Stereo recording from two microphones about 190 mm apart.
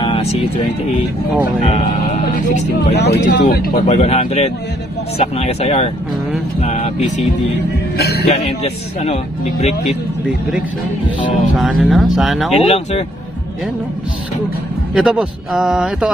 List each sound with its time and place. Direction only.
0.0 s vehicle: 30° left (ahead or behind)
1.6 s speech: 35° left (ahead or behind)
3.0 s speech: 65° left (ahead or behind); by 7.2 s 35° left (ahead or behind)
8.0 s speech: 60° left (ahead or behind)
8.5 s speech: 30° left (ahead or behind)
11.5 s a man's voice: centre (ahead or behind)
12.5 s speech: 35° left (ahead or behind)
15.0 s a man's voice: 5° right (ahead or behind)